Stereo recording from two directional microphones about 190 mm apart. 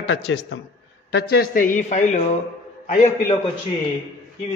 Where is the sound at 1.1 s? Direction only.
55° left (ahead or behind); by 3.3 s 35° left (ahead or behind).